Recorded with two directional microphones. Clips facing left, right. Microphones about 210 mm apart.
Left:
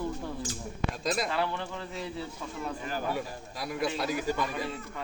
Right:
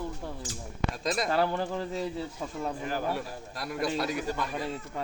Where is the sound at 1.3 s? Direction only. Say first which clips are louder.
Right 4 dB; 40° right (ahead or behind).